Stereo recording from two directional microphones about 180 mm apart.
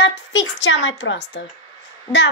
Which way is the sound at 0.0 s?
85° left.